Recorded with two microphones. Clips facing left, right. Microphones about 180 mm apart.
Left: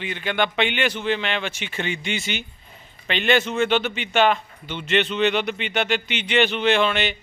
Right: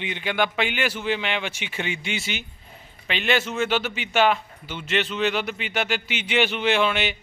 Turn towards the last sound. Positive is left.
turn(degrees=-5)  # may be behind; listen again after turning